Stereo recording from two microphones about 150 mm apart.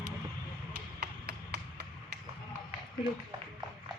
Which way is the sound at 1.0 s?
90° right.